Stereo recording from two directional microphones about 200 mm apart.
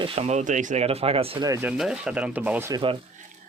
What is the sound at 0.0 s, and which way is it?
Speech, 35° right (ahead or behind).